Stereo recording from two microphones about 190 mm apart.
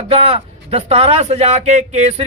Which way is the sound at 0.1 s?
30° right (ahead or behind).